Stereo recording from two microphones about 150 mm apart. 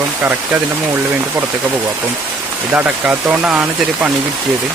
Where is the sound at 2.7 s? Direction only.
10° right (ahead or behind).